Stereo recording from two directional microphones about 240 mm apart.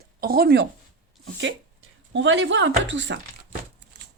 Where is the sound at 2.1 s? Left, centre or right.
Right.